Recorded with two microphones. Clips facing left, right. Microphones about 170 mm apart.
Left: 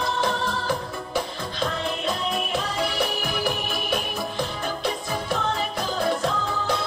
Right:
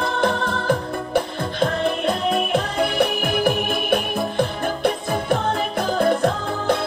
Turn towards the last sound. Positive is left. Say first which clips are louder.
# right 4 dB
turn(degrees=-55)  # may be behind; listen again after turning